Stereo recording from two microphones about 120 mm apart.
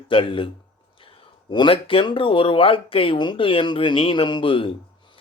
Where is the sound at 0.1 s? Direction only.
45° left (ahead or behind).